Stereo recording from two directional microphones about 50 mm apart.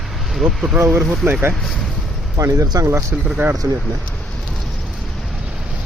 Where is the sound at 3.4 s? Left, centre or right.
Right.